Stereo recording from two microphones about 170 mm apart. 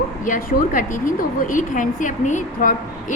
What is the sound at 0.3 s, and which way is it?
A woman's voice, 50° left (ahead or behind).